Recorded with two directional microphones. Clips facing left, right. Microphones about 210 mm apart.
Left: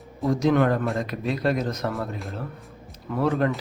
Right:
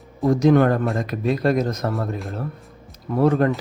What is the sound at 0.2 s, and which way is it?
Speech, 45° right (ahead or behind).